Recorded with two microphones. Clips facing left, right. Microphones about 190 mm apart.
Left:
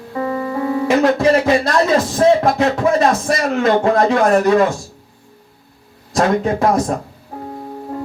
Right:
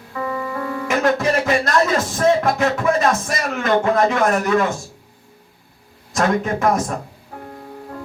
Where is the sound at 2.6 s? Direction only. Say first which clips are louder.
Left 3 dB; 35° left (ahead or behind).